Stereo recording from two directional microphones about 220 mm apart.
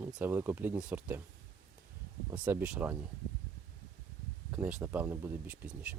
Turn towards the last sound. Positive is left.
turn(degrees=-5)  # may be behind; listen again after turning